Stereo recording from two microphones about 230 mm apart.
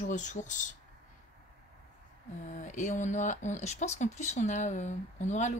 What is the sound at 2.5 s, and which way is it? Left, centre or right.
Speech, left.